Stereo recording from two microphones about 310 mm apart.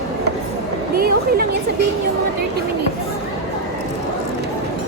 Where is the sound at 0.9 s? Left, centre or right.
Right.